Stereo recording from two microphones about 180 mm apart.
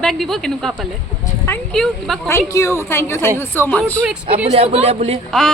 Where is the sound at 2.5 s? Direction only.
15° left (ahead or behind).